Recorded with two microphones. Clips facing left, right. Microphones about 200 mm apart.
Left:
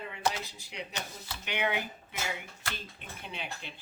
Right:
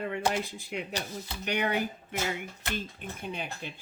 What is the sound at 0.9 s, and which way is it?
Speech, 40° right (ahead or behind).